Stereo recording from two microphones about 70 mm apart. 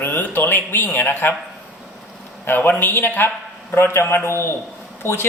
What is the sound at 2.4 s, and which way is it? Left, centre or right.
A man's voice, left.